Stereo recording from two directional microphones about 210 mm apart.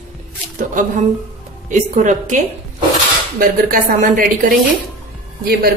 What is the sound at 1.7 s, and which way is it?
A woman's voice, 35° right (ahead or behind).